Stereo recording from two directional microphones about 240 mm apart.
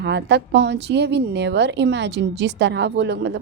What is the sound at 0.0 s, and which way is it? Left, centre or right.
A woman's voice, right.